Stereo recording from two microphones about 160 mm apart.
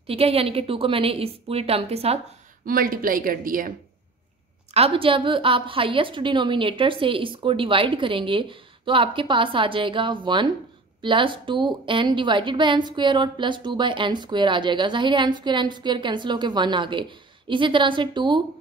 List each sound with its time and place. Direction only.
0.0 s a woman's voice: 35° right (ahead or behind)
2.6 s speech: 65° right (ahead or behind)
4.7 s a woman's voice: 35° right (ahead or behind)